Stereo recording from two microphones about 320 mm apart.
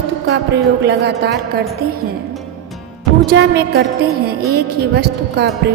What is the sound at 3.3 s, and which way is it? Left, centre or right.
Music, right.